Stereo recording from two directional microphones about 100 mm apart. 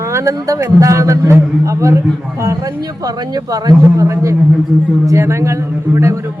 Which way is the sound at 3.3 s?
40° right (ahead or behind).